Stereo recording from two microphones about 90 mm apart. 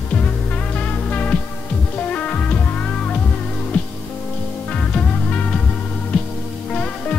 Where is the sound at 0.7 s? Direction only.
15° left (ahead or behind).